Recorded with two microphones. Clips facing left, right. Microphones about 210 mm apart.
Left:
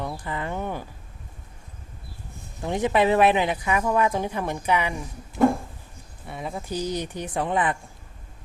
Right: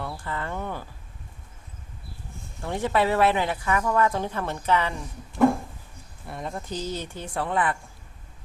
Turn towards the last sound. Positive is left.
turn(degrees=20)  # may be behind; listen again after turning